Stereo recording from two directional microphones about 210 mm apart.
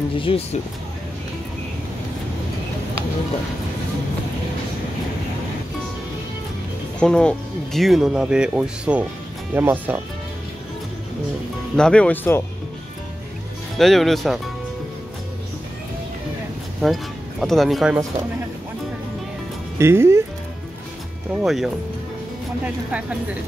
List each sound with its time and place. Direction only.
0.2 s speech: 25° left (ahead or behind)
7.0 s speech: 5° left (ahead or behind)
11.7 s speech: 5° left (ahead or behind)
13.7 s speech: centre (ahead or behind)
16.8 s speech: centre (ahead or behind)
19.8 s speech: 10° right (ahead or behind)
21.3 s speech: 5° right (ahead or behind)
22.8 s speech: 5° right (ahead or behind)